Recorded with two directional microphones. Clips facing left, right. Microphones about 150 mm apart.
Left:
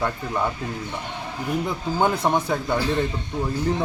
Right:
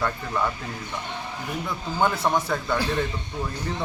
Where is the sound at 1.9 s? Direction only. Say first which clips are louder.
Left 2 dB; 20° left (ahead or behind).